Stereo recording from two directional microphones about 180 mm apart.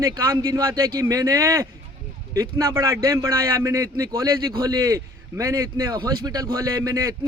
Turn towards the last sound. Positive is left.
turn(degrees=-15)  # may be behind; listen again after turning